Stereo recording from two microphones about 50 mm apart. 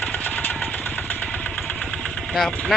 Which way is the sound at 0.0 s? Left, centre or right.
Left.